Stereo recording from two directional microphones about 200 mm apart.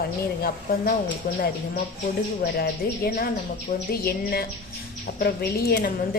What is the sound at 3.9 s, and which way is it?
Speech, 50° left (ahead or behind).